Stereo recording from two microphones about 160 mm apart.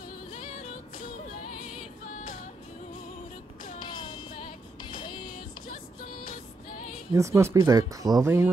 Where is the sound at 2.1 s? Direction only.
55° left (ahead or behind).